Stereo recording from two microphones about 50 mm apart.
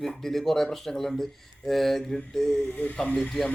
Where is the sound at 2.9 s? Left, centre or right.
Centre.